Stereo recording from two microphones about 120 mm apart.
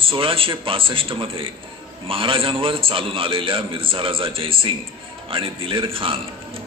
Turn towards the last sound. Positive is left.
turn(degrees=-50)  # may be behind; listen again after turning